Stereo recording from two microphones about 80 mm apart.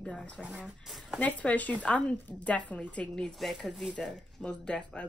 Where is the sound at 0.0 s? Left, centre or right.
Centre.